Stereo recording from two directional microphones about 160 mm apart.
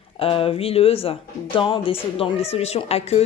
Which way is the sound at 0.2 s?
35° left (ahead or behind).